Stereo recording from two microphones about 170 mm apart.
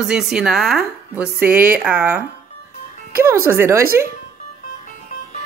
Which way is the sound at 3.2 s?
15° right (ahead or behind).